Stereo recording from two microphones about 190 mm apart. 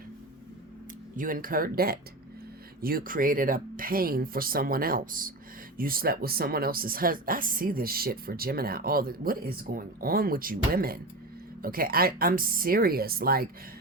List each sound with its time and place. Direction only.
1.1 s speech: 45° right (ahead or behind)